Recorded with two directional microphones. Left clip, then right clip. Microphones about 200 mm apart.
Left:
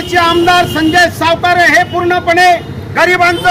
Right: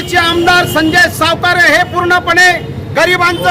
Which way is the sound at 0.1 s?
5° right (ahead or behind).